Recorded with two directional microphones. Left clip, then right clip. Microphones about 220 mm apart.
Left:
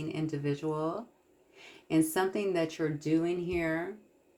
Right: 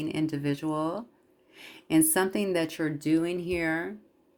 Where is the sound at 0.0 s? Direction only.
50° right (ahead or behind).